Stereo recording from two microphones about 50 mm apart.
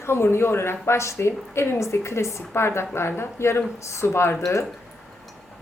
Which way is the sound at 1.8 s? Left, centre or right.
Left.